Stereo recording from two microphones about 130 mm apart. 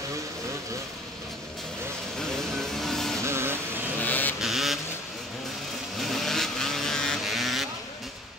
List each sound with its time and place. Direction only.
2.1 s vehicle: 5° left (ahead or behind)
3.3 s vehicle: 20° right (ahead or behind)
4.0 s vehicle: 15° left (ahead or behind)
4.4 s vehicle: centre (ahead or behind)
5.9 s vehicle: centre (ahead or behind)